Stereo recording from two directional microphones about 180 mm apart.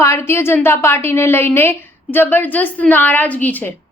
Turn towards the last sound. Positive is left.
turn(degrees=10)  # may be behind; listen again after turning